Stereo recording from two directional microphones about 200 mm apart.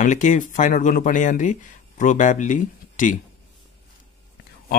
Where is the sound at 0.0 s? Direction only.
40° left (ahead or behind).